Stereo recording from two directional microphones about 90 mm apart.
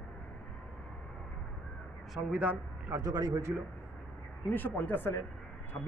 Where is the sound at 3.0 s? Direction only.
45° right (ahead or behind).